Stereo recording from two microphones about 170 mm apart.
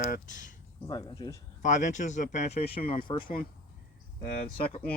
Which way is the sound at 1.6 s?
45° left (ahead or behind).